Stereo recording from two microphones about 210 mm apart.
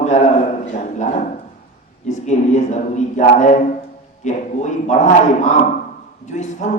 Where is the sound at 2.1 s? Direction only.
35° left (ahead or behind).